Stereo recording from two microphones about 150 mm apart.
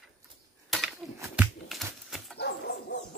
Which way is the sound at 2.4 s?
90° left.